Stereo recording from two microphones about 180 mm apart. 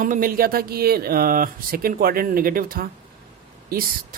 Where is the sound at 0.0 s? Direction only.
50° right (ahead or behind).